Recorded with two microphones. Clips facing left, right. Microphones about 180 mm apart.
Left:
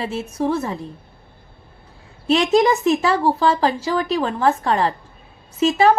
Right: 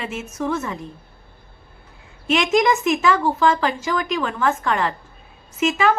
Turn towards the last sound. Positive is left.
turn(degrees=35)  # may be behind; listen again after turning